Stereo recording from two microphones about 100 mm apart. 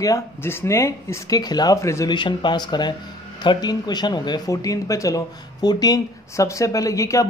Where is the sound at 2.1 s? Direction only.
50° left (ahead or behind).